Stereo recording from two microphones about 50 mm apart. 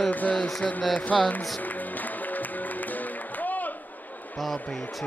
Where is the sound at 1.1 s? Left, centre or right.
Centre.